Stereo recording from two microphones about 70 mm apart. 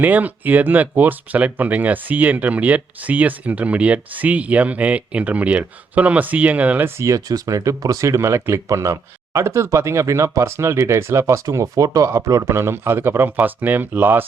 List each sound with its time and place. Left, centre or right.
0.0 s speech: right
6.8 s speech: right
7.3 s speech: right